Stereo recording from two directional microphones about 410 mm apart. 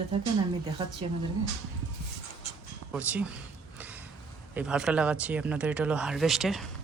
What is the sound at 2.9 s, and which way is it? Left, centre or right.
Speech, centre.